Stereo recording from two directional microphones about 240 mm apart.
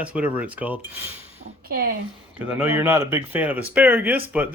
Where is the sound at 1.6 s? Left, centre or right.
Right.